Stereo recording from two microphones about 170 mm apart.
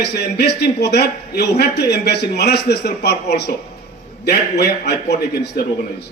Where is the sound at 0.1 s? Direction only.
75° left (ahead or behind).